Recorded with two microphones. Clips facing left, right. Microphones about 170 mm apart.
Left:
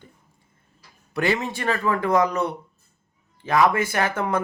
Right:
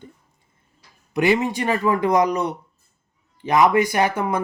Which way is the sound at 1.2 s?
15° right (ahead or behind).